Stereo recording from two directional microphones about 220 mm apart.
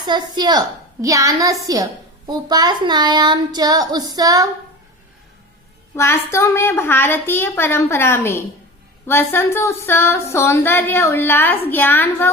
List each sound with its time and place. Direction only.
0.0 s a woman's voice: 20° right (ahead or behind)
6.0 s speech: 10° left (ahead or behind)